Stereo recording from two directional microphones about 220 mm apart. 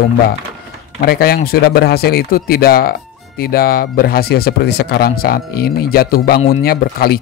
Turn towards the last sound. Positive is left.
turn(degrees=45)  # may be behind; listen again after turning